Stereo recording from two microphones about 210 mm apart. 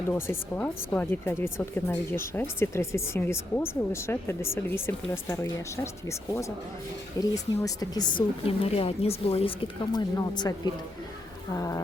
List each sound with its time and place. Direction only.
0.1 s a woman's voice: 10° left (ahead or behind)